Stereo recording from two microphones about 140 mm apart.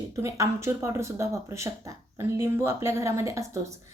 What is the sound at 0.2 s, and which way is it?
A woman's voice, 20° right (ahead or behind).